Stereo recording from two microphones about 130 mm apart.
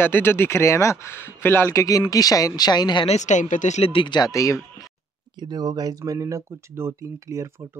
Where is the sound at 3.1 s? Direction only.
65° left (ahead or behind).